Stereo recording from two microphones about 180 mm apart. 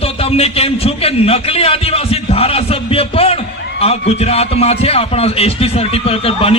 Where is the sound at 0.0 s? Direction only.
35° left (ahead or behind).